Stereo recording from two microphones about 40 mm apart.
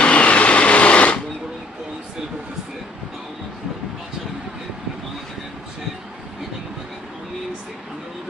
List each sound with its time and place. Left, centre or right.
0.0 s sewing machine: left